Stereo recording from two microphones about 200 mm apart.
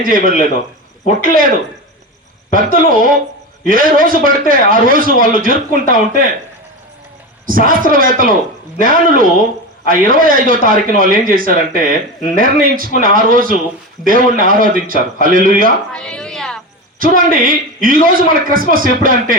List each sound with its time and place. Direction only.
0.0 s a man's voice: 45° right (ahead or behind)
2.5 s a man's voice: 45° right (ahead or behind)
7.4 s a man's voice: 45° right (ahead or behind)
15.9 s music: 5° left (ahead or behind)
17.0 s a man's voice: 45° right (ahead or behind)